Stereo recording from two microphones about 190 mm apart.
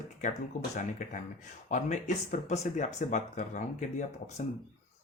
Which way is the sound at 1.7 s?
40° left (ahead or behind).